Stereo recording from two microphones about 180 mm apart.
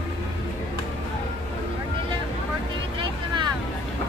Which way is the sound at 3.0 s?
25° right (ahead or behind).